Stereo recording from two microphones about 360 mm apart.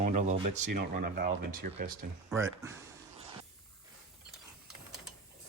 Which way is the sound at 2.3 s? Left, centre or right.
Centre.